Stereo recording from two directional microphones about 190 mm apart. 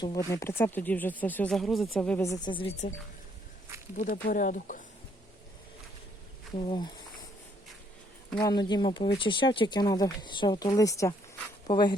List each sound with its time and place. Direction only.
0.3 s speech: 15° left (ahead or behind)
2.2 s speech: 20° left (ahead or behind)
3.9 s speech: 45° left (ahead or behind)
6.6 s speech: 25° left (ahead or behind)
8.4 s speech: 20° left (ahead or behind)